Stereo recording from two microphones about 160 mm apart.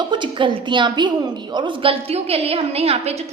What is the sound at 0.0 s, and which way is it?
A woman's voice, 30° right (ahead or behind).